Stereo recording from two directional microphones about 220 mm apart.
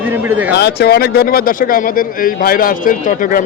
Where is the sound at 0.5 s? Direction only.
50° left (ahead or behind).